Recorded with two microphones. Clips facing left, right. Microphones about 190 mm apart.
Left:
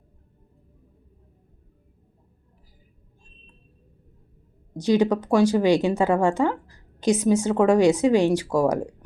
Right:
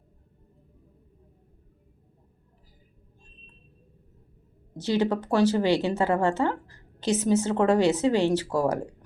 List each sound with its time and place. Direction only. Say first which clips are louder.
4.8 s speech: left 5 dB; 15° left (ahead or behind)